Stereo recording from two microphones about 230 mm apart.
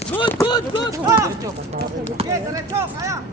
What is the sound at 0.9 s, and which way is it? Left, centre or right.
Speech, centre.